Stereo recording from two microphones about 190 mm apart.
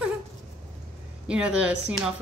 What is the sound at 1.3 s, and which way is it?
Speech, 5° right (ahead or behind).